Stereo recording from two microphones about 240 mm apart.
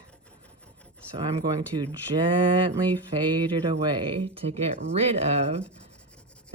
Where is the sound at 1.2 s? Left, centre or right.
Centre.